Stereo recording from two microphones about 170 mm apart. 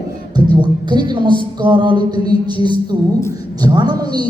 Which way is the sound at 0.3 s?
25° right (ahead or behind).